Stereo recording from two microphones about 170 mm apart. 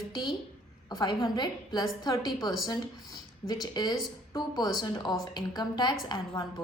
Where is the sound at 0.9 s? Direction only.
25° left (ahead or behind).